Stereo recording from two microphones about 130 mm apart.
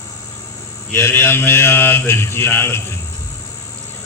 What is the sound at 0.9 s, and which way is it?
Mantra, 20° left (ahead or behind).